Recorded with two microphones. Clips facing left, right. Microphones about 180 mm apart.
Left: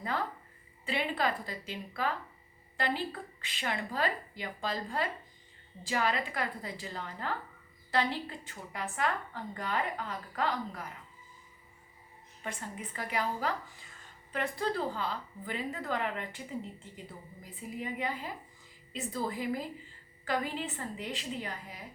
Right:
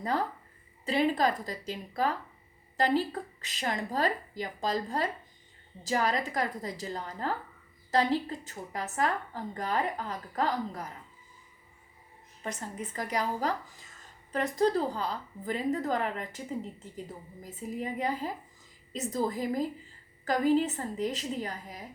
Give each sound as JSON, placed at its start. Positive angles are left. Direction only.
{"t": 0.0, "sound": "a woman's voice", "side_deg": -40}
{"t": 12.4, "sound": "a woman's voice", "side_deg": -40}
{"t": 17.4, "sound": "a woman's voice", "side_deg": -40}